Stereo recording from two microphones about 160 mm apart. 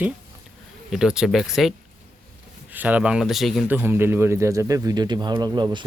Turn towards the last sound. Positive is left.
turn(degrees=-30)  # may be behind; listen again after turning